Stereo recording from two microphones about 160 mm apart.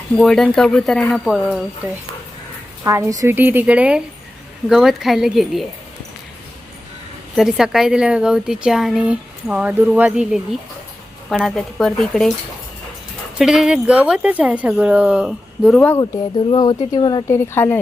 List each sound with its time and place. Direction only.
0.2 s a woman's voice: 5° left (ahead or behind)
2.8 s a woman's voice: 20° right (ahead or behind); by 5.6 s centre (ahead or behind)
7.3 s a woman's voice: 5° right (ahead or behind)
13.4 s speech: 5° right (ahead or behind)
16.5 s speech: 25° left (ahead or behind)
17.2 s speech: 15° left (ahead or behind)